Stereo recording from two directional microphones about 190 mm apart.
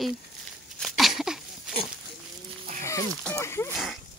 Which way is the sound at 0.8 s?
Centre (ahead or behind).